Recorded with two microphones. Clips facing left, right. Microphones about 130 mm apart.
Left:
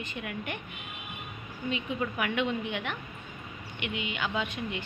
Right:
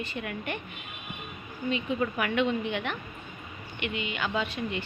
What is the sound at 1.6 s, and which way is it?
A woman's voice, 15° left (ahead or behind).